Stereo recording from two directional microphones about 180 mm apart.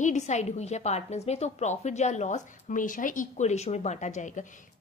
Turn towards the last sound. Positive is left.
turn(degrees=40)  # may be behind; listen again after turning